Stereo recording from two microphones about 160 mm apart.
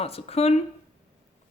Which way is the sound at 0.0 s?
40° left (ahead or behind).